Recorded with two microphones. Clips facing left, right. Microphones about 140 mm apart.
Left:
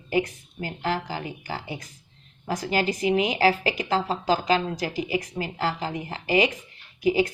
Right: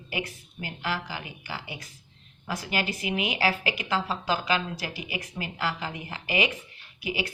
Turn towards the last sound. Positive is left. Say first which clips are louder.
# left 10 dB
turn(degrees=40)  # may be behind; listen again after turning